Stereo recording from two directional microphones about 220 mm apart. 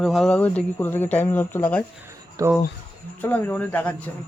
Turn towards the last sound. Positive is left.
turn(degrees=10)  # may be behind; listen again after turning